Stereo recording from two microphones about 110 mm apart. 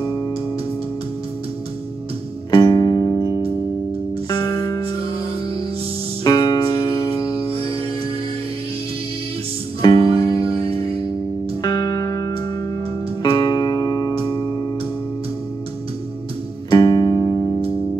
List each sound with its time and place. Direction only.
0.0 s music: 30° left (ahead or behind)
2.5 s music: 40° left (ahead or behind)
6.2 s music: 40° left (ahead or behind)
9.8 s music: 40° left (ahead or behind)
16.7 s music: 40° left (ahead or behind)